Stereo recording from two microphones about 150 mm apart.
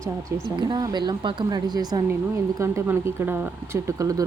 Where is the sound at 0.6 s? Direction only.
30° right (ahead or behind).